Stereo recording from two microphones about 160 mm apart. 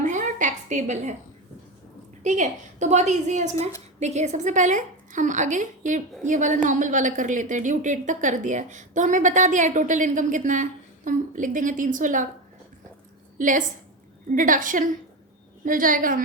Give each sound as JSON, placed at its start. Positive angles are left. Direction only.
{"t": 0.0, "sound": "a sound", "side_deg": -50}
{"t": 2.2, "sound": "speech", "side_deg": -50}
{"t": 13.4, "sound": "a woman's voice", "side_deg": -55}